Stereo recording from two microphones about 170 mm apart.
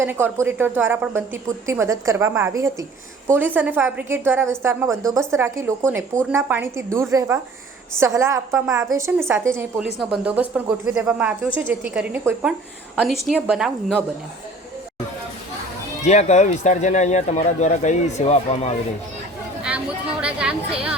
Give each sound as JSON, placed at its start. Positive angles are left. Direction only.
{"t": 0.0, "sound": "speech", "side_deg": -15}
{"t": 16.0, "sound": "speech", "side_deg": 40}
{"t": 20.2, "sound": "speech", "side_deg": -5}